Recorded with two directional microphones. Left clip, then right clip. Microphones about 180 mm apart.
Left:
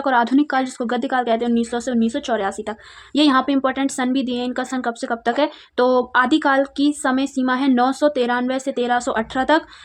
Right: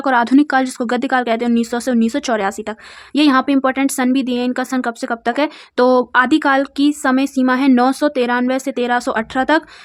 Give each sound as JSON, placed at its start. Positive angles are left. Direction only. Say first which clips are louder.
{"t": 0.0, "sound": "speech", "louder": "right 3 dB", "side_deg": -35}